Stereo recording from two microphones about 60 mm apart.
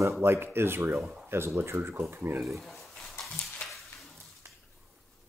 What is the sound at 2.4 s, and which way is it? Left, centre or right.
Speech, centre.